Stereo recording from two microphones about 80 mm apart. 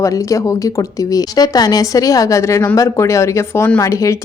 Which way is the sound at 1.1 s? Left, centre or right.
Left.